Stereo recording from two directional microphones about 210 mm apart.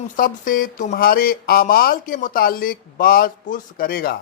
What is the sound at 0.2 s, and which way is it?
Speech, 40° left (ahead or behind).